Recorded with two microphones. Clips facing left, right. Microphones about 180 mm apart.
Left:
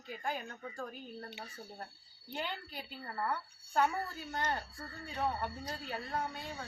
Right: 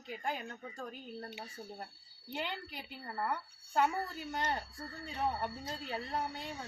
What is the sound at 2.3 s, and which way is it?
Speech, 20° right (ahead or behind).